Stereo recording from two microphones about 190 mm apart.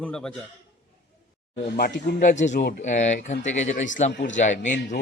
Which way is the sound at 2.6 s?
55° left (ahead or behind).